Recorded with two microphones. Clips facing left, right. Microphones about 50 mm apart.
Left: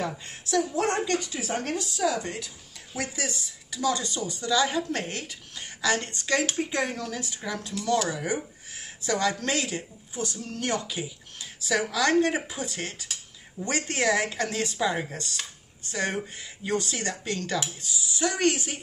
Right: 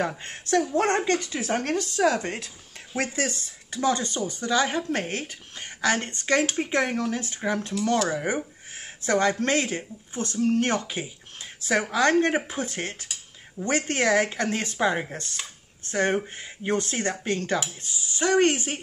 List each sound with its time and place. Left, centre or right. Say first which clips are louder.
0.2 s a woman's voice: right 3 dB; right
6.4 s speech: right 2 dB; centre
6.7 s speech: right 4 dB; right
10.1 s speech: right 9 dB; right